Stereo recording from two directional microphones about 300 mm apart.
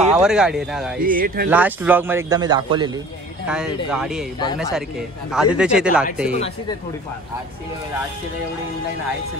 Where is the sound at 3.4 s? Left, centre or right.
Centre.